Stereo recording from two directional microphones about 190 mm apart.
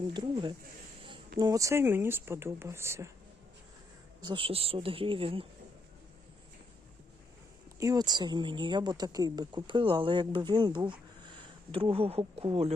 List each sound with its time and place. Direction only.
0.1 s speech: 25° right (ahead or behind)
4.2 s speech: 25° right (ahead or behind)
7.8 s speech: 20° right (ahead or behind)